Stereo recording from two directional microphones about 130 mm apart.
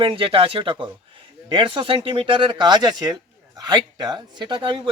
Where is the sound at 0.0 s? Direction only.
45° right (ahead or behind).